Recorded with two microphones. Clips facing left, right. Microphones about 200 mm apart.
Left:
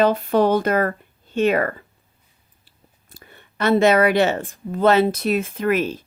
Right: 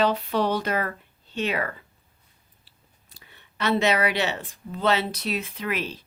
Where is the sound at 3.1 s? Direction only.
50° left (ahead or behind).